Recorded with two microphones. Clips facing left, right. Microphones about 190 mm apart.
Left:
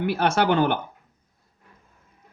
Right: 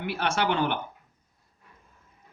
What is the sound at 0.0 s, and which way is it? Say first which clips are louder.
Speech: left 6 dB; 40° left (ahead or behind).